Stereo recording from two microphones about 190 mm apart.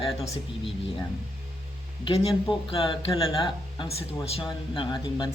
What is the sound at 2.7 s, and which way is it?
Speech, 30° left (ahead or behind).